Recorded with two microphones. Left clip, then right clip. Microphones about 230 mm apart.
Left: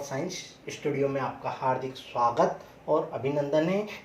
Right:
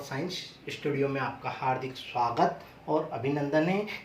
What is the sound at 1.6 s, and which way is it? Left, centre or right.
Speech, right.